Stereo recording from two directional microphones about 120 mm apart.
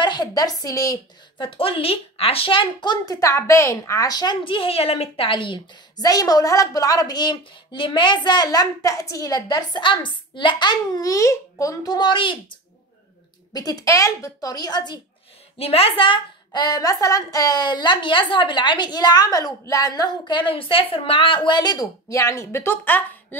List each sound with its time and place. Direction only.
0.0 s a woman's voice: 35° left (ahead or behind)
1.4 s speech: 50° left (ahead or behind)
3.2 s a woman's voice: 25° left (ahead or behind); by 12.5 s 45° left (ahead or behind)
13.5 s a woman's voice: 30° left (ahead or behind)
15.5 s a woman's voice: 55° left (ahead or behind); by 23.0 s 15° left (ahead or behind)